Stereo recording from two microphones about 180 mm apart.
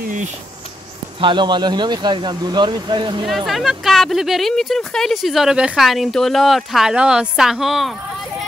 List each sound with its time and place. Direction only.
0.0 s a sound: 45° right (ahead or behind)
1.2 s speech: 25° right (ahead or behind)
3.3 s speech: centre (ahead or behind)